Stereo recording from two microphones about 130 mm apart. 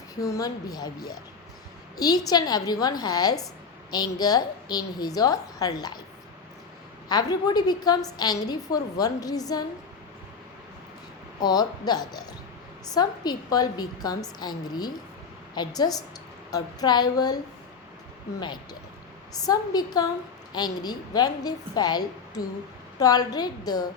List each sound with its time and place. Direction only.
0.2 s a woman's voice: 25° left (ahead or behind)
7.1 s a woman's voice: 30° left (ahead or behind)
11.3 s a woman's voice: 30° left (ahead or behind)